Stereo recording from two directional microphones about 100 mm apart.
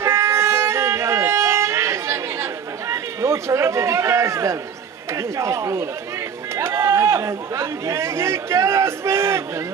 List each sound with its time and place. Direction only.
0.0 s violin: 30° right (ahead or behind)
2.9 s speech: 30° right (ahead or behind)